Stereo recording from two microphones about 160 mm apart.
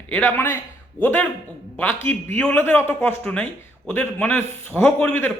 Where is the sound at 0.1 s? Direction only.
10° left (ahead or behind).